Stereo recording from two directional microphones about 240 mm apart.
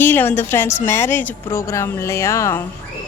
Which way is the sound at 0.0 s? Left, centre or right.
Centre.